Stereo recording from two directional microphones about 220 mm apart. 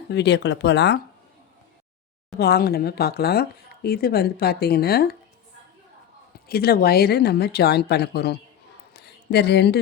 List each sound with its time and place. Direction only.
0.1 s speech: 50° left (ahead or behind)
2.4 s speech: 45° left (ahead or behind)
6.5 s speech: 45° left (ahead or behind)
8.9 s a sound: 45° left (ahead or behind)